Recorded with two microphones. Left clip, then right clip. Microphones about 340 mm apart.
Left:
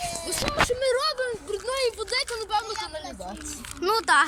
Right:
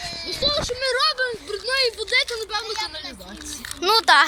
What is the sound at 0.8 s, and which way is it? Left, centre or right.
Speech, centre.